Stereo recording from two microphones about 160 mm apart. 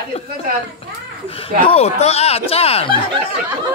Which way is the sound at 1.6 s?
40° left (ahead or behind).